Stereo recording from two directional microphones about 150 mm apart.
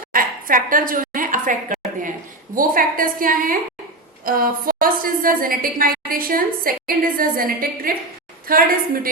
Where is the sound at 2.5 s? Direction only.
70° right (ahead or behind).